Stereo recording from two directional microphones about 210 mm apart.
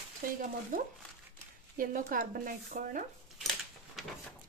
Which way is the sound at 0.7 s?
40° right (ahead or behind).